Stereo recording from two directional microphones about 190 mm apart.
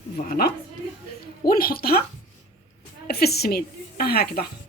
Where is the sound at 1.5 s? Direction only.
50° left (ahead or behind).